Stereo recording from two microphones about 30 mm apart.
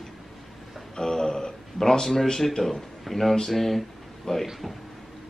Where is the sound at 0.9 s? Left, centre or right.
Centre.